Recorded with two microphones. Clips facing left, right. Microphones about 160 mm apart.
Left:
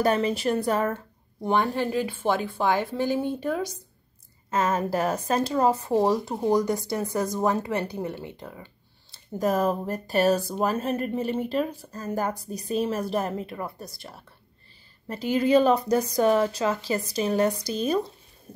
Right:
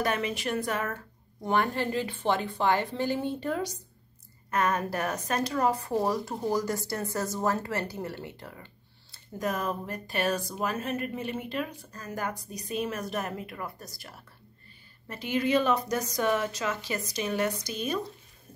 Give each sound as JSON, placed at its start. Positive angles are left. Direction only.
{"t": 0.0, "sound": "speech", "side_deg": 35}
{"t": 1.4, "sound": "a woman's voice", "side_deg": 10}
{"t": 4.5, "sound": "a woman's voice", "side_deg": 25}
{"t": 9.1, "sound": "a woman's voice", "side_deg": 35}